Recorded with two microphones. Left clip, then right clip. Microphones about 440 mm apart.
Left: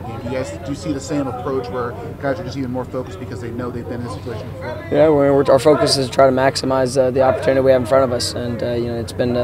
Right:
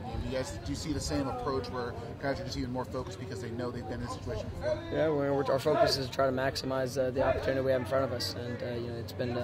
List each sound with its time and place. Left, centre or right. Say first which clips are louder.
0.3 s speech: left 12 dB; left
4.9 s speech: left 18 dB; left